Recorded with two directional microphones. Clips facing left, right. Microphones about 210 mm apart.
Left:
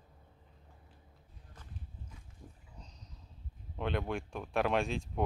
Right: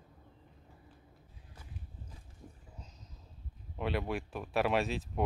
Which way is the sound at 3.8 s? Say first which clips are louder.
Right 1 dB; 5° right (ahead or behind).